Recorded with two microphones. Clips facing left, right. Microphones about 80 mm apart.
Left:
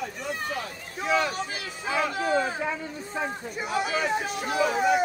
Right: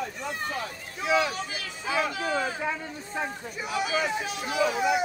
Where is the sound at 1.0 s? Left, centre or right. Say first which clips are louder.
Even; left.